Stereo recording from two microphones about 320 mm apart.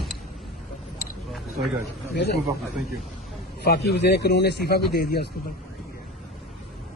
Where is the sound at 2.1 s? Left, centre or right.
Left.